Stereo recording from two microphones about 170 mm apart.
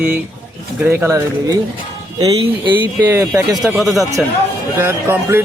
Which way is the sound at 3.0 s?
15° right (ahead or behind).